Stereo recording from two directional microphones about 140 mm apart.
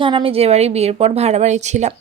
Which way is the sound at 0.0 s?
40° right (ahead or behind).